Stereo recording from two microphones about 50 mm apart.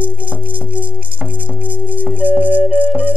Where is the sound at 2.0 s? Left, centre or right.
Right.